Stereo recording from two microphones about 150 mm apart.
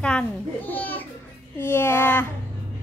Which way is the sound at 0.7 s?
10° left (ahead or behind).